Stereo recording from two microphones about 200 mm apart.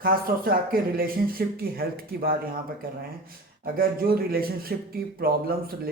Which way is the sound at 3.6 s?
50° right (ahead or behind).